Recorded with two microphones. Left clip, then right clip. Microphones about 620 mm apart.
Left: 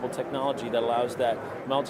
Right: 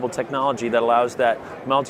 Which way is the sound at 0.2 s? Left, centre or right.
Right.